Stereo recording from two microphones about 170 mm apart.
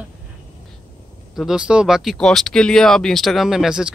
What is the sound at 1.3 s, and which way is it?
Speech, centre (ahead or behind).